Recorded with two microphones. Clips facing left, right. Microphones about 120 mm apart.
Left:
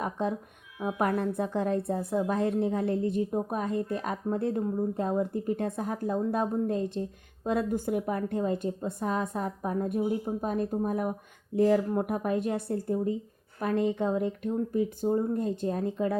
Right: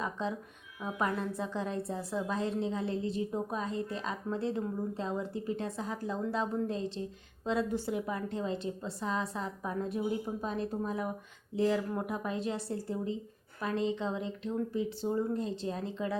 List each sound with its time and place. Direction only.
0.0 s a woman's voice: 55° left (ahead or behind)